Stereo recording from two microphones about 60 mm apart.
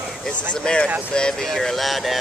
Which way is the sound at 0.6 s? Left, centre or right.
Centre.